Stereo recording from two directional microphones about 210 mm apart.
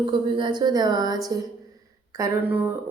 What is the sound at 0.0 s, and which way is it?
A woman's voice, 25° right (ahead or behind).